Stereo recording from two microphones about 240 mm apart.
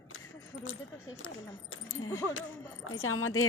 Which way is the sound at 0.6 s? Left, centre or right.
Left.